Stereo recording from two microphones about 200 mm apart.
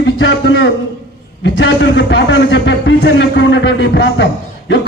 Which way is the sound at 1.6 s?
60° left (ahead or behind).